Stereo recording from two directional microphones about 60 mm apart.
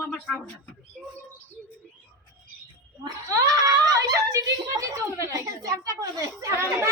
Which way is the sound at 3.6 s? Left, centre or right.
Right.